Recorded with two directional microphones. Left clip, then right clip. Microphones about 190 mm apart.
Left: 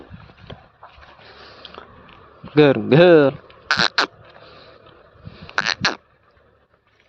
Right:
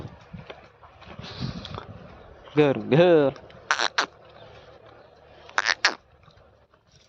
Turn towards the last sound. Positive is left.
turn(degrees=20)  # may be behind; listen again after turning